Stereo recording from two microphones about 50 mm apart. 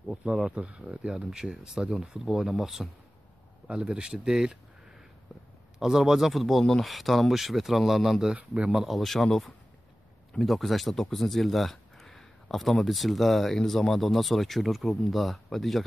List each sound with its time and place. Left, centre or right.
0.5 s speech: right; by 2.9 s centre
3.6 s speech: centre
5.8 s speech: centre